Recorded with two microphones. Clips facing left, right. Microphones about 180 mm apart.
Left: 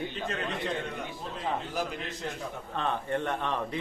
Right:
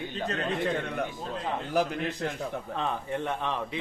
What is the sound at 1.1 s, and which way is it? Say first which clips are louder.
A man's voice: right 1 dB; 55° right (ahead or behind).